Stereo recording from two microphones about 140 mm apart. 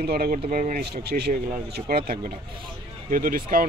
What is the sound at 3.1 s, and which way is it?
Speech, 90° right.